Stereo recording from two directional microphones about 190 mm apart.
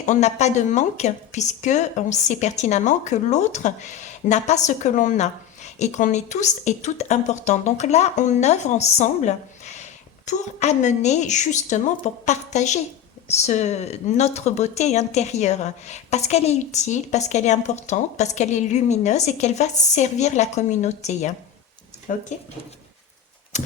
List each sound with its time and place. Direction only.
0.0 s a woman's voice: 40° left (ahead or behind)
23.5 s typewriter: 40° left (ahead or behind)